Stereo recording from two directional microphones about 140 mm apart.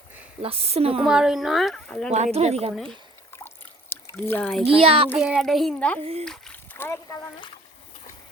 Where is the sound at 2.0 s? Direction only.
50° right (ahead or behind).